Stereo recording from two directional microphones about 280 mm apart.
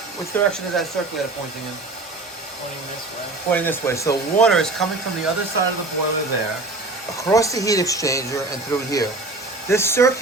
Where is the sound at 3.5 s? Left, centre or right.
Centre.